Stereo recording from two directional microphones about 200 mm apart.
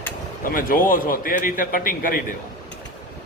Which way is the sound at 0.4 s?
45° left (ahead or behind).